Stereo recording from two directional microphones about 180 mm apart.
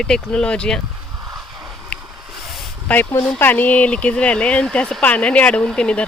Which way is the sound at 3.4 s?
10° left (ahead or behind).